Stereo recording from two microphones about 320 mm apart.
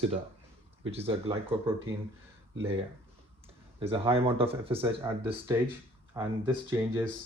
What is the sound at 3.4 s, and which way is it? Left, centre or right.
Speech, centre.